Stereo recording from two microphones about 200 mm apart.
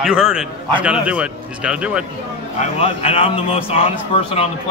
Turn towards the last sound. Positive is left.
turn(degrees=30)  # may be behind; listen again after turning